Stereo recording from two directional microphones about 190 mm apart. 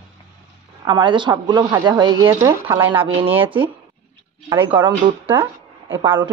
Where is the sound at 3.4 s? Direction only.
25° right (ahead or behind).